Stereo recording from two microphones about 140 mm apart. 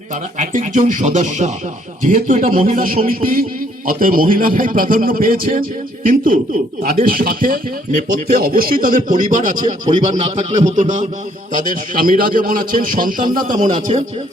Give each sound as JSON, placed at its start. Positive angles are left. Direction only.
{"t": 0.3, "sound": "a man's voice", "side_deg": -60}
{"t": 6.8, "sound": "a man's voice", "side_deg": -90}
{"t": 11.5, "sound": "a man's voice", "side_deg": -75}
{"t": 13.2, "sound": "speech", "side_deg": -30}
{"t": 13.5, "sound": "speech", "side_deg": -65}